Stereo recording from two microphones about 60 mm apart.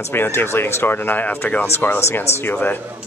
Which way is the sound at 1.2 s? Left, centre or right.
Left.